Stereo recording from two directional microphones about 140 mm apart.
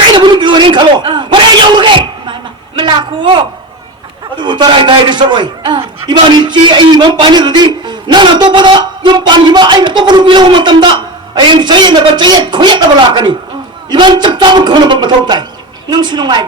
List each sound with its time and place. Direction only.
0.2 s a man's voice: 35° right (ahead or behind)
4.4 s a man's voice: 35° right (ahead or behind)